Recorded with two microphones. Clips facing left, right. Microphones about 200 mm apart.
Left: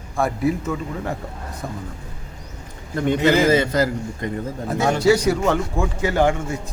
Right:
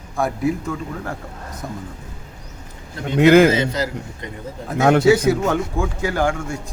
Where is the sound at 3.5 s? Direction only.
50° left (ahead or behind).